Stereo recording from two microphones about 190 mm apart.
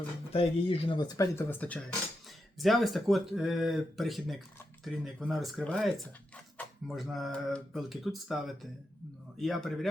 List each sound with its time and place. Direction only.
0.3 s speech: 30° left (ahead or behind); by 9.8 s centre (ahead or behind)